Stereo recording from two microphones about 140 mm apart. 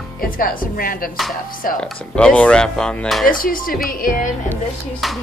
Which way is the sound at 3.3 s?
85° left.